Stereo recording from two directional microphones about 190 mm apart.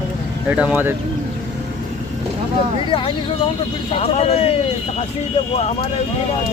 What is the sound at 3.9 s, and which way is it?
Speech, 30° left (ahead or behind).